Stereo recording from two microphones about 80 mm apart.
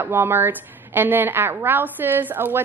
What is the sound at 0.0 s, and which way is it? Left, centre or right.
A woman's voice, right.